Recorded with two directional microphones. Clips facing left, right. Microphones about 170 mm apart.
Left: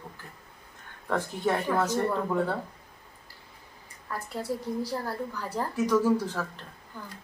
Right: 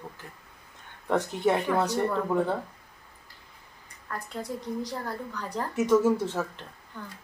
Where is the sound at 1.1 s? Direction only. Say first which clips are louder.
Right 3 dB; 20° right (ahead or behind).